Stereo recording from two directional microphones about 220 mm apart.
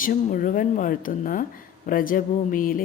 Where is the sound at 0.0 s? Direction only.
40° left (ahead or behind).